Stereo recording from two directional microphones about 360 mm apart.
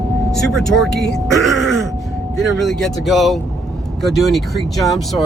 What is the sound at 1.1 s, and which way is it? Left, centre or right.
Groan, centre.